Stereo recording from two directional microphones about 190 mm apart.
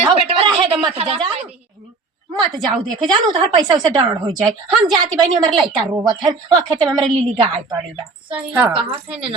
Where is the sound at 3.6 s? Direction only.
20° right (ahead or behind).